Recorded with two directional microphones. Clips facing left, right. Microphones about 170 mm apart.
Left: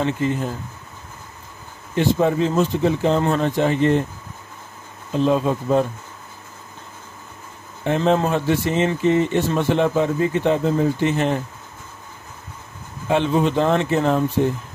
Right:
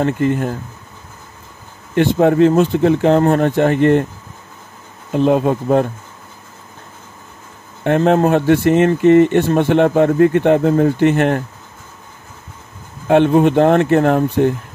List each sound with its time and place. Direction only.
0.0 s speech: 55° right (ahead or behind)
2.0 s speech: 60° right (ahead or behind)
5.1 s speech: 60° right (ahead or behind)
7.8 s speech: 60° right (ahead or behind)
13.1 s speech: 60° right (ahead or behind)